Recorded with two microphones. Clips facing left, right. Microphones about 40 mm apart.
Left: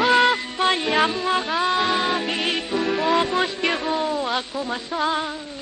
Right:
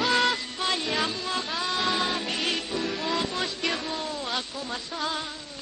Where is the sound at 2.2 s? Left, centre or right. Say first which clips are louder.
Left 5 dB; left.